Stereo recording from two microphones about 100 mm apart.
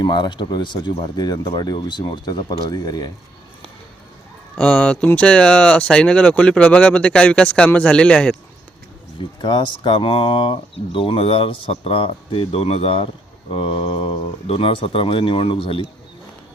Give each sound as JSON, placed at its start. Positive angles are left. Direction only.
{"t": 0.0, "sound": "speech", "side_deg": 50}
{"t": 4.6, "sound": "speech", "side_deg": 15}
{"t": 9.1, "sound": "speech", "side_deg": 50}